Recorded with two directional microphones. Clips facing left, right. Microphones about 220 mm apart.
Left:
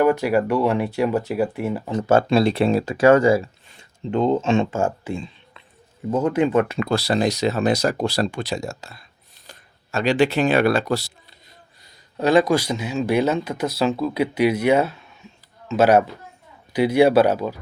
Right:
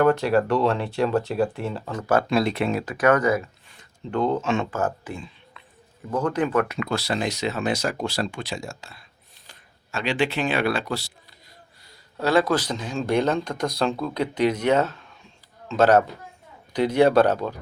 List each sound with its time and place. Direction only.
0.0 s speech: 10° left (ahead or behind); by 11.1 s 40° left (ahead or behind)
12.1 s speech: 15° left (ahead or behind)